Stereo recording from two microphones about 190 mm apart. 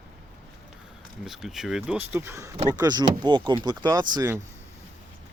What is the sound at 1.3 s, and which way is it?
Speech, centre (ahead or behind).